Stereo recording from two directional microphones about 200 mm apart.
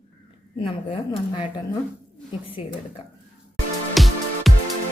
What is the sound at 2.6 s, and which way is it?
Speech, 30° left (ahead or behind).